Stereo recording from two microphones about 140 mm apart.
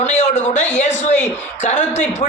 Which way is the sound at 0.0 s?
55° left (ahead or behind).